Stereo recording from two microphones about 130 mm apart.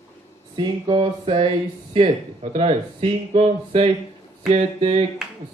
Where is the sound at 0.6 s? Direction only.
40° right (ahead or behind).